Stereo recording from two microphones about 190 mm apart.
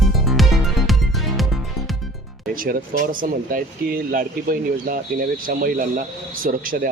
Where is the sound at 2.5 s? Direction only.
45° right (ahead or behind).